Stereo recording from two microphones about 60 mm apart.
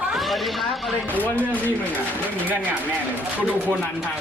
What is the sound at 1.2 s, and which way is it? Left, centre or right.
Speech, left.